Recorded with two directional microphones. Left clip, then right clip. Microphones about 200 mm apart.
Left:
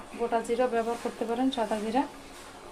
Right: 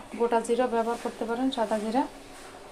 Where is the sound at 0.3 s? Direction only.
25° right (ahead or behind).